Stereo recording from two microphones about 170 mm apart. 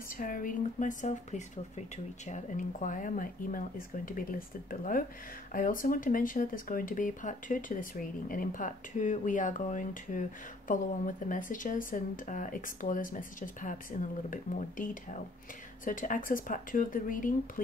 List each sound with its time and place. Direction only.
0.2 s speech: 55° left (ahead or behind)